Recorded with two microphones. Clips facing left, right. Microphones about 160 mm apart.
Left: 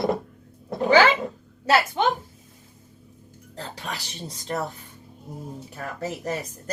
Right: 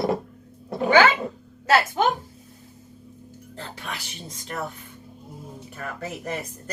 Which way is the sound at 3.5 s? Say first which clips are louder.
Left 2 dB; 35° left (ahead or behind).